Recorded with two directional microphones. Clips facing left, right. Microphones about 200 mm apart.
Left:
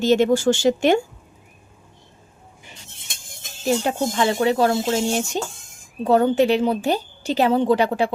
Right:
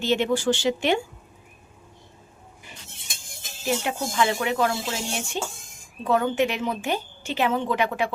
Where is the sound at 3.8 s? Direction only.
35° left (ahead or behind).